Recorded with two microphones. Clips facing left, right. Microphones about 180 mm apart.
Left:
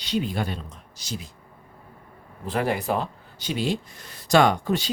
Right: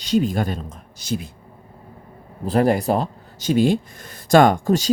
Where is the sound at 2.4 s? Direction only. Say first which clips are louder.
Right 7 dB; 40° right (ahead or behind).